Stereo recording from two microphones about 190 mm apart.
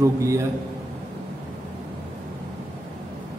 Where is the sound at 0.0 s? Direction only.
15° right (ahead or behind).